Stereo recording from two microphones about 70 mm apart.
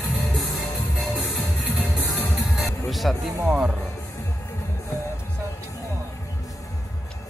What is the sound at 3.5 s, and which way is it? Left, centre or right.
Speech, centre.